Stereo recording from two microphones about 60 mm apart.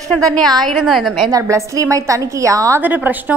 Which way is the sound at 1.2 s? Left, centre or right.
Right.